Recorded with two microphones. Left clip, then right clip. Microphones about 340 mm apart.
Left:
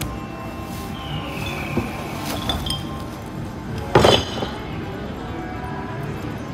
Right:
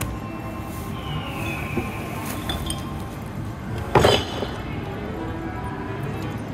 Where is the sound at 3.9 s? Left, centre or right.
Left.